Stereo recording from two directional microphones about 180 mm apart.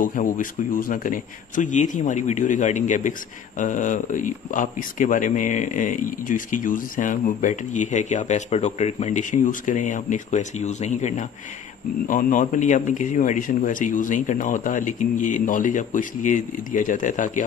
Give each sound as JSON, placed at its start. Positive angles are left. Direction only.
{"t": 0.0, "sound": "speech", "side_deg": 50}